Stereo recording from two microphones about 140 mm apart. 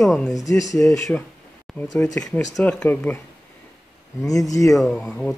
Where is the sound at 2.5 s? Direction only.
10° left (ahead or behind).